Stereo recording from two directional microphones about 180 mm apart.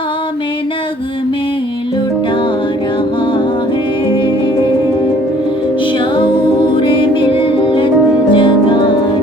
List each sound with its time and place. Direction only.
5.8 s music: 30° left (ahead or behind)